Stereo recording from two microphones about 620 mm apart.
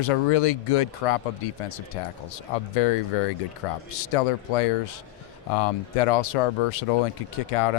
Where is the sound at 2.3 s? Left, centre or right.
Left.